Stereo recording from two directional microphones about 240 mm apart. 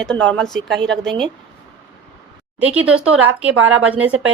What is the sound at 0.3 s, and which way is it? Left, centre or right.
Speech, centre.